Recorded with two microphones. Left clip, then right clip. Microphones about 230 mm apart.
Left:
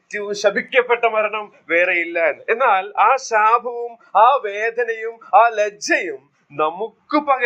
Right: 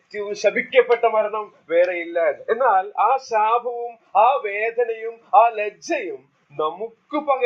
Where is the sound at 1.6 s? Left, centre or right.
Left.